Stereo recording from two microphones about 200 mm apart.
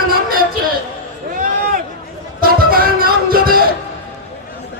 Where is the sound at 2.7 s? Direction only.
45° right (ahead or behind).